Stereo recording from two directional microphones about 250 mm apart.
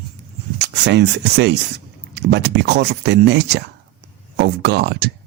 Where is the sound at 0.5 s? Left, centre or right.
Right.